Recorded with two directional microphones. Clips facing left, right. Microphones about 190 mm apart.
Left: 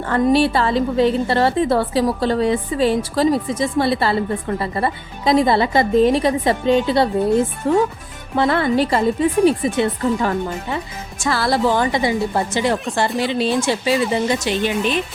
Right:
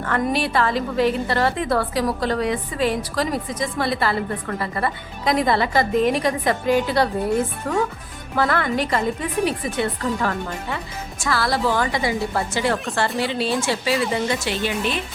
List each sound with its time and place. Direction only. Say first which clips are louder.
0.0 s a woman's voice: left 7 dB; 30° left (ahead or behind)